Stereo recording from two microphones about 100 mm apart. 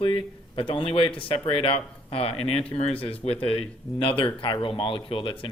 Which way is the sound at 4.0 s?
65° left (ahead or behind).